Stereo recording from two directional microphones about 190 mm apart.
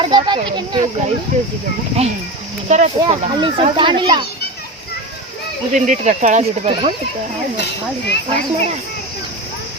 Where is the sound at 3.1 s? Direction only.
25° right (ahead or behind).